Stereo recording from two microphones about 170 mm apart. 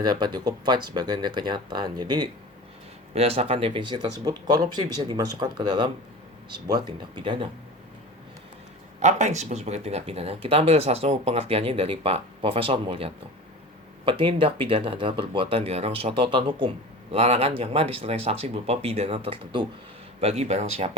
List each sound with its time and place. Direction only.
0.0 s speech: 25° right (ahead or behind)
3.1 s speech: 35° right (ahead or behind)
9.0 s speech: 45° right (ahead or behind)